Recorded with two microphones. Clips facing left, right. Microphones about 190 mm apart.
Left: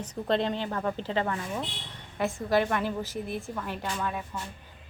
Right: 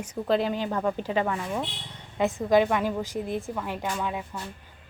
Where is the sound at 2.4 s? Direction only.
15° right (ahead or behind).